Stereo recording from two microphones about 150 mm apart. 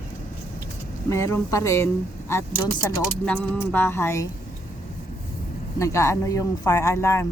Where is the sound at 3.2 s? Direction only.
10° left (ahead or behind).